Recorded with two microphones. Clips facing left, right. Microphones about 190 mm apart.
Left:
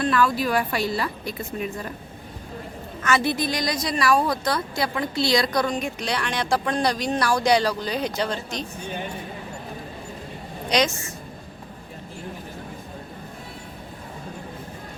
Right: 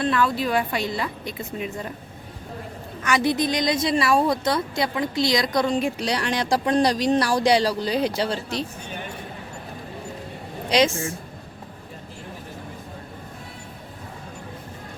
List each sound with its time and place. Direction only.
0.0 s a woman's voice: 20° right (ahead or behind)
3.0 s a woman's voice: 15° right (ahead or behind); by 8.6 s 30° right (ahead or behind)
10.7 s a woman's voice: 30° right (ahead or behind)